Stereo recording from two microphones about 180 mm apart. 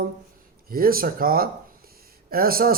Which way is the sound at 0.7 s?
55° right (ahead or behind).